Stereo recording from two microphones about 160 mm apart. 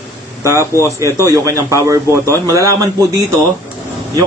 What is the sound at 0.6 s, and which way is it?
Speech, 20° left (ahead or behind).